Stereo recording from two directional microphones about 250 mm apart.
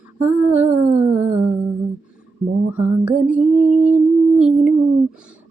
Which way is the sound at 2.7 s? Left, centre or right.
Centre.